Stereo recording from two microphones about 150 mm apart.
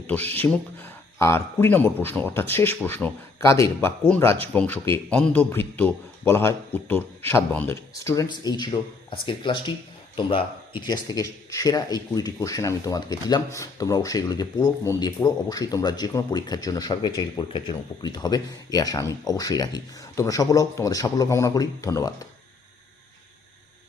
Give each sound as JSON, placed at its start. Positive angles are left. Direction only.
{"t": 0.1, "sound": "speech", "side_deg": 10}